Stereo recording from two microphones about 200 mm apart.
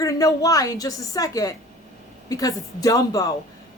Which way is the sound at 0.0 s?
15° left (ahead or behind).